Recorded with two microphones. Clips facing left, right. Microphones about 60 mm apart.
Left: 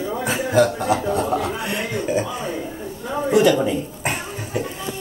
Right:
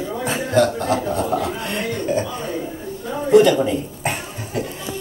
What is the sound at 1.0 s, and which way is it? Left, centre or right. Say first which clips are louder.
Chuckle: even; centre.